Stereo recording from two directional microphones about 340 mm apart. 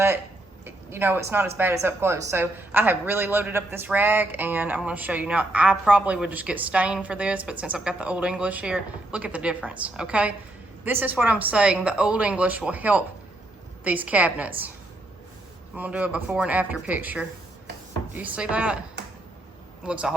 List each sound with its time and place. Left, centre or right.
0.6 s speech: centre
15.7 s speech: centre
19.8 s speech: centre